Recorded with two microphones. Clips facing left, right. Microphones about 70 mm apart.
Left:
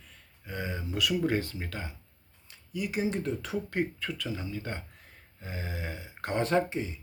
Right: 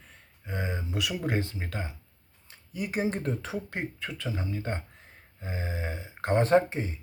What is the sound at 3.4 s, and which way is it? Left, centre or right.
Speech, right.